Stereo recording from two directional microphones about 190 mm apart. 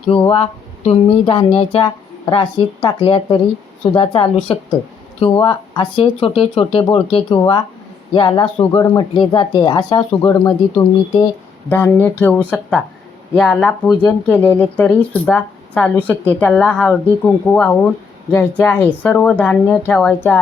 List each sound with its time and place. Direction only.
0.1 s speech: 30° left (ahead or behind)
11.7 s speech: 10° left (ahead or behind)